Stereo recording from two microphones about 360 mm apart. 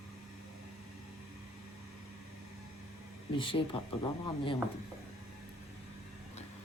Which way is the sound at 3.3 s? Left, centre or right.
Centre.